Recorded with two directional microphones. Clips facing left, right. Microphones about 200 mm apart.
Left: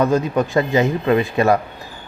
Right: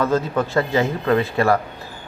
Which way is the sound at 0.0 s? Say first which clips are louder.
Left 3 dB; 15° left (ahead or behind).